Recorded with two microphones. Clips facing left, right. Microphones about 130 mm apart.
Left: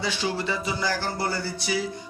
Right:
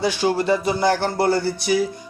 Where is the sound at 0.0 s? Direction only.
50° right (ahead or behind).